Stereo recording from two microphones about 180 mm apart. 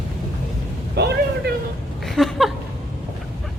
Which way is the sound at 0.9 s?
65° right (ahead or behind).